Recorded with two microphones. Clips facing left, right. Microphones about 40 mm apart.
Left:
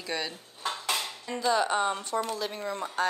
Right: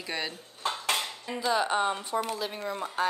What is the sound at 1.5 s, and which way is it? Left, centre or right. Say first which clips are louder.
Speech: right 1 dB; centre.